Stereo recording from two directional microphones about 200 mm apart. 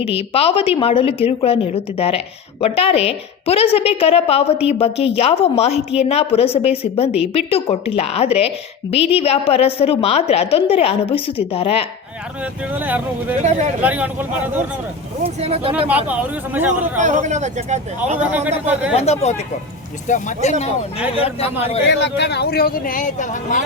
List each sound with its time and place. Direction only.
0.1 s a woman's voice: 30° left (ahead or behind)
12.7 s speech: 10° right (ahead or behind)
15.4 s speech: 30° right (ahead or behind)
16.0 s speech: 10° right (ahead or behind)
17.0 s speech: 35° right (ahead or behind)
18.3 s speech: 5° right (ahead or behind)
18.9 s a woman's voice: 30° left (ahead or behind)
21.8 s a man's voice: 60° left (ahead or behind); by 23.6 s 40° left (ahead or behind)